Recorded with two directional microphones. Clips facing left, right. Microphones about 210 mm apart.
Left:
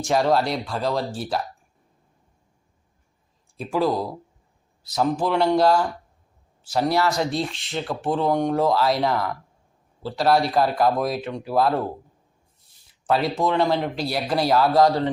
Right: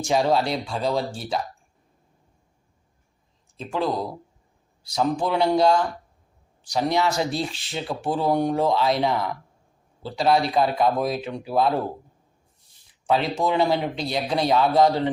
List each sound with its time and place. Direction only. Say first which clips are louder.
0.0 s speech: left 1 dB; centre (ahead or behind)
3.6 s speech: left 3 dB; 5° left (ahead or behind)
13.1 s speech: left 1 dB; centre (ahead or behind)
14.8 s speech: left 1 dB; 20° right (ahead or behind)